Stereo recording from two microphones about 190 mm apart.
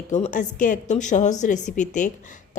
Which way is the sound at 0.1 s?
40° left (ahead or behind).